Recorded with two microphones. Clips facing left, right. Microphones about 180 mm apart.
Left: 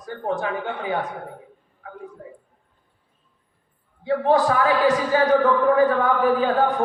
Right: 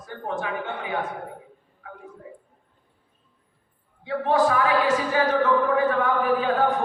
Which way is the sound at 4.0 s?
35° left (ahead or behind).